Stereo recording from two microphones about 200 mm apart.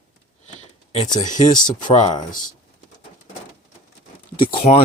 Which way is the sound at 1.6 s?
20° left (ahead or behind).